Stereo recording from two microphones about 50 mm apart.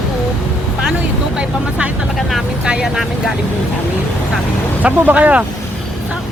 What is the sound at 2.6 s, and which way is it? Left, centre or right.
Vehicle, centre.